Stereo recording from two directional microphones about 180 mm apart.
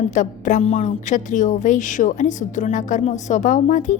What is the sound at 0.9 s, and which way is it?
A woman's voice, 45° left (ahead or behind).